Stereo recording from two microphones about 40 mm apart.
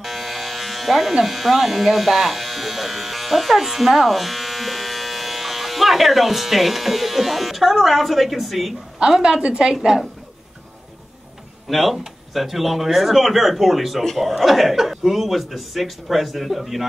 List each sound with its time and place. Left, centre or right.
0.0 s speech: centre
9.0 s a woman's voice: centre
9.8 s a woman's voice: centre
11.7 s speech: centre